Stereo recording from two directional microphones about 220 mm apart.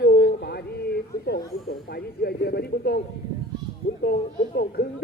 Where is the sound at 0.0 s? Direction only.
50° left (ahead or behind).